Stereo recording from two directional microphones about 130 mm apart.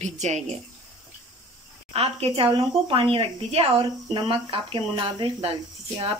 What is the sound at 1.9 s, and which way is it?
Speech, 50° right (ahead or behind).